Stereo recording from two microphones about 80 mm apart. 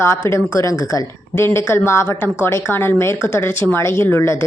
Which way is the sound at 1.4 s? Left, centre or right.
Left.